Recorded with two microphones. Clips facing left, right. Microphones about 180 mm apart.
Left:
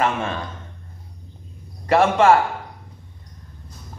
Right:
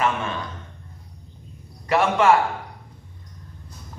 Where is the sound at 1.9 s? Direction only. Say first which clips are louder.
Left 3 dB; 30° left (ahead or behind).